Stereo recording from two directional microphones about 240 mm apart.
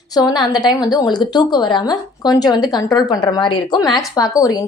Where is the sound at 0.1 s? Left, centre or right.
Centre.